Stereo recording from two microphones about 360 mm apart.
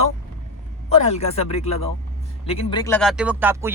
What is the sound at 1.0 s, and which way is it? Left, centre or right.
Speech, centre.